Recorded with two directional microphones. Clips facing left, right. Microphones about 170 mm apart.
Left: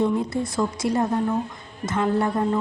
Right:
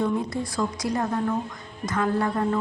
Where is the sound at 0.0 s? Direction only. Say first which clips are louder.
Left 3 dB; 25° left (ahead or behind).